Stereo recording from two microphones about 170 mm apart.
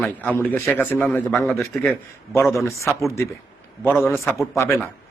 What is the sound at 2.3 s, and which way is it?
Speech, 15° left (ahead or behind).